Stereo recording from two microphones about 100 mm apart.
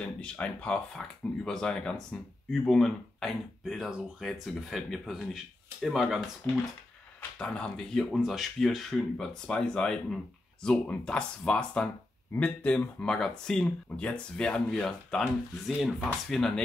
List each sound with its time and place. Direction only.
0.0 s speech: 10° left (ahead or behind)
7.2 s speech: 10° left (ahead or behind)